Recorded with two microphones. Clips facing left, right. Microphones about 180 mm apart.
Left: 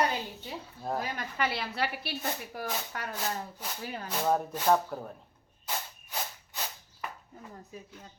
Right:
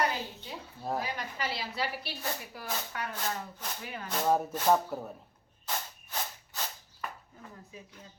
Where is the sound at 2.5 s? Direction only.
45° left (ahead or behind).